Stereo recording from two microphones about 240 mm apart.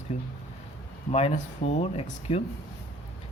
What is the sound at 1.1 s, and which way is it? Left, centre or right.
Speech, left.